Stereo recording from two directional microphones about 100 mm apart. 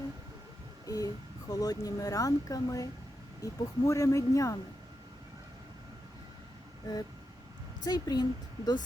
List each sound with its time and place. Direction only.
0.9 s speech: 35° left (ahead or behind)
7.9 s a woman's voice: 45° left (ahead or behind)